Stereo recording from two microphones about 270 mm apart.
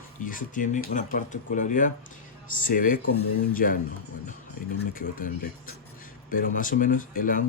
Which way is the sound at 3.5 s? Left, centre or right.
Left.